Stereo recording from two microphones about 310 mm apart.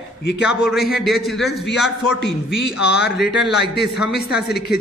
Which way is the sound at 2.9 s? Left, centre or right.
Left.